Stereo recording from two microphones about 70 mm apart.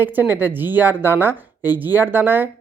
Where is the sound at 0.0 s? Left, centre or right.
Right.